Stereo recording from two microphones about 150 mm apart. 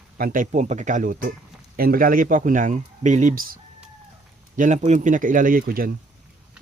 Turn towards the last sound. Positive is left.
turn(degrees=-70)  # may be behind; listen again after turning